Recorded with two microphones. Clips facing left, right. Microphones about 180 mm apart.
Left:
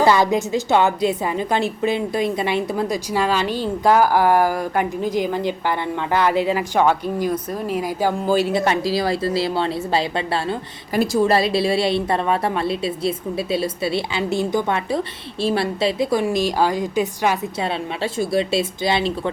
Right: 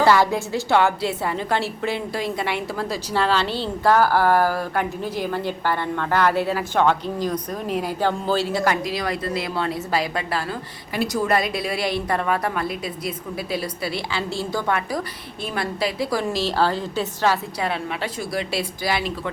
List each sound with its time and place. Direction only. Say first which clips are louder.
0.0 s a woman's voice: left 2 dB; 20° left (ahead or behind)